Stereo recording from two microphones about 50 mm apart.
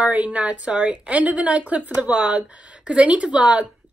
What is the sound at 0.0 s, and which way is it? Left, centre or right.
Speech, right.